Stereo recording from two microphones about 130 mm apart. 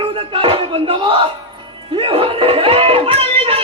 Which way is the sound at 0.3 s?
45° right (ahead or behind).